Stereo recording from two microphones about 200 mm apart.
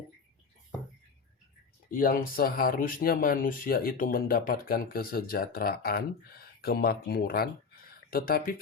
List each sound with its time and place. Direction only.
1.9 s speech: 45° left (ahead or behind)